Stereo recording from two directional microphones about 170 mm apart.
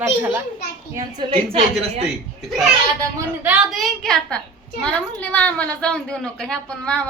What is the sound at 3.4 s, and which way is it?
A woman's voice, 5° right (ahead or behind).